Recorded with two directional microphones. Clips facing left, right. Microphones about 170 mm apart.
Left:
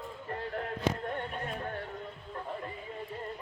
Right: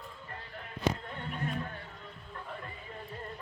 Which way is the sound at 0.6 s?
55° left (ahead or behind).